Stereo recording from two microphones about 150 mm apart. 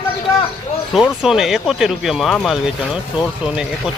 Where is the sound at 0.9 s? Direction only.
Centre (ahead or behind).